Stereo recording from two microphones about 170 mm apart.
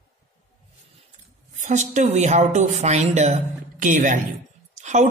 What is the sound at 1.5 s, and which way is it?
Speech, 45° right (ahead or behind).